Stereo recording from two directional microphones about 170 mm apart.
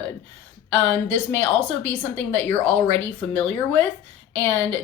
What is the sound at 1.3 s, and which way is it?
Speech, 10° left (ahead or behind).